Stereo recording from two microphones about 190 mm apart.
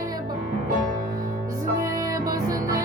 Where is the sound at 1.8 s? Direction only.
20° right (ahead or behind).